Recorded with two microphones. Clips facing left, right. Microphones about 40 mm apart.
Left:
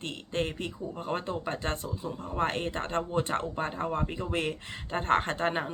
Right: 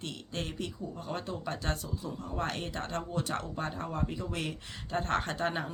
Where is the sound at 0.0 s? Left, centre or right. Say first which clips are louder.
Left 6 dB; left.